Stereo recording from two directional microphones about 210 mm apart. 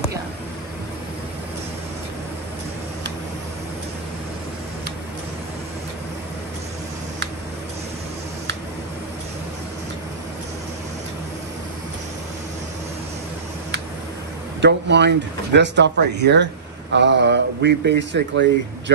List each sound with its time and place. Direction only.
14.6 s speech: 55° right (ahead or behind)